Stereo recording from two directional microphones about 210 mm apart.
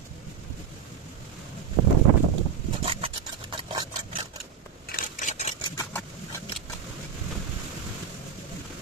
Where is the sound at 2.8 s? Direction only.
25° right (ahead or behind).